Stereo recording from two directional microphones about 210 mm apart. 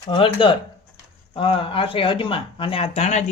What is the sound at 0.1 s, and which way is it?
Speech, 25° left (ahead or behind).